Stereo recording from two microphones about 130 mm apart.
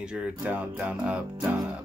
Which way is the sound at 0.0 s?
5° right (ahead or behind).